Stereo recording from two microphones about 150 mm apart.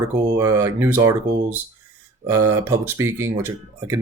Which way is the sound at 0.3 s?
20° right (ahead or behind).